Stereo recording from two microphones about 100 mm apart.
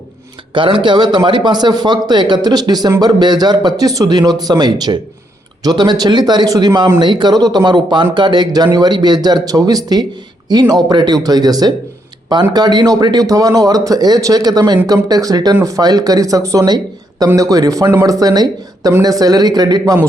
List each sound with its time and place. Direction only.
0.5 s a man's voice: 55° right (ahead or behind)